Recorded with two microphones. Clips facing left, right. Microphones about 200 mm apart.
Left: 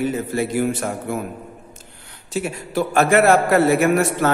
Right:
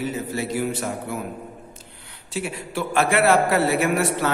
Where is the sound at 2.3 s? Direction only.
45° left (ahead or behind).